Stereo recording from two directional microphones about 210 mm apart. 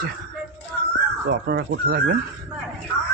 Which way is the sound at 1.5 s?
50° right (ahead or behind).